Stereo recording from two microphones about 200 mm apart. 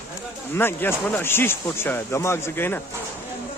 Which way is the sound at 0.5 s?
10° left (ahead or behind).